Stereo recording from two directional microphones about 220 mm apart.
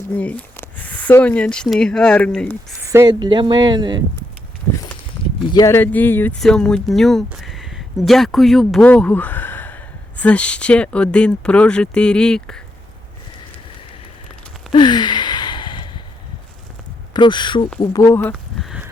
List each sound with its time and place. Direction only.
0.1 s speech: 5° left (ahead or behind)
2.8 s a woman's voice: 15° right (ahead or behind)
5.5 s speech: 15° left (ahead or behind)
14.7 s gasp: 20° left (ahead or behind)
17.2 s speech: 20° left (ahead or behind); by 18.9 s centre (ahead or behind)